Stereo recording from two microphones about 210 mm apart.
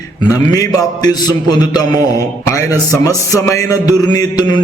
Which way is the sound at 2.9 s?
15° left (ahead or behind).